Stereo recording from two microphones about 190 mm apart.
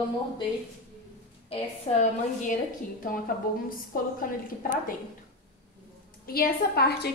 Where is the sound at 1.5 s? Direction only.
35° left (ahead or behind).